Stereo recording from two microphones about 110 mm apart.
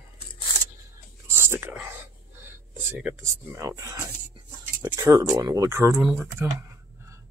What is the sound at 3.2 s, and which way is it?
Speech, 25° right (ahead or behind).